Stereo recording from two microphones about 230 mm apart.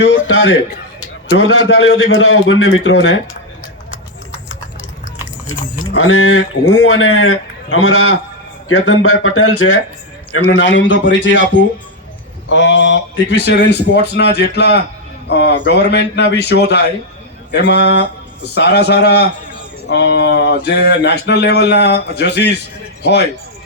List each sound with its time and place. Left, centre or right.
0.1 s speech: left
5.5 s speech: left
10.3 s speech: left
10.6 s speech: left